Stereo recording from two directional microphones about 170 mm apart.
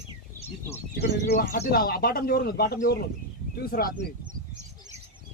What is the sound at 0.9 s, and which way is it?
Speech, 65° left (ahead or behind).